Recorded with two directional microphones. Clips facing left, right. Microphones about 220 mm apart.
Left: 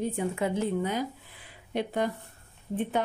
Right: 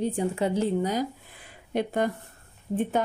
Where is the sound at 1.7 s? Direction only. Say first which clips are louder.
Right 3 dB; 50° right (ahead or behind).